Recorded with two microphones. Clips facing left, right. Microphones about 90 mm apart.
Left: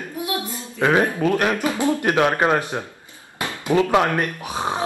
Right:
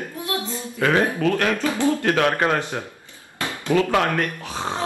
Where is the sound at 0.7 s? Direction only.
20° left (ahead or behind).